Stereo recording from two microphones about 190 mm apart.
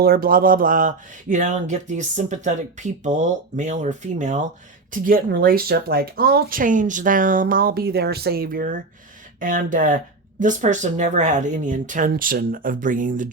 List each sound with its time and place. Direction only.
0.0 s speech: 50° right (ahead or behind)